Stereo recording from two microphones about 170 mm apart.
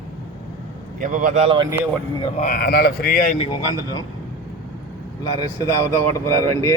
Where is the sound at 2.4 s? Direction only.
60° left (ahead or behind).